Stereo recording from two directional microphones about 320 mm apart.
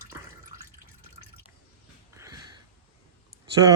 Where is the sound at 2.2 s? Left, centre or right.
Centre.